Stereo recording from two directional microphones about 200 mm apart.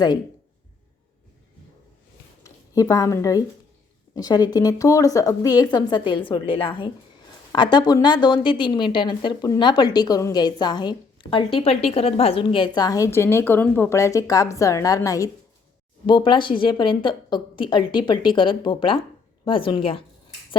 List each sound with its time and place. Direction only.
2.4 s a woman's voice: 15° left (ahead or behind)